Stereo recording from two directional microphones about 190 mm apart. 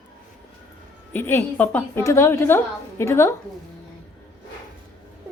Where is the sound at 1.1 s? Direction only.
10° left (ahead or behind).